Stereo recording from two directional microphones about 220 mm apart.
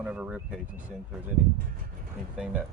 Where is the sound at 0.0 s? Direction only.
5° right (ahead or behind).